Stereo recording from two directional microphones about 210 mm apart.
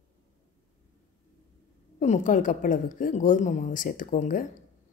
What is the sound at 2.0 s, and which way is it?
A woman's voice, 35° left (ahead or behind).